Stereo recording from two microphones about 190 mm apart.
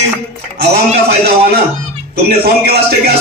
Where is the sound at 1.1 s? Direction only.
55° right (ahead or behind).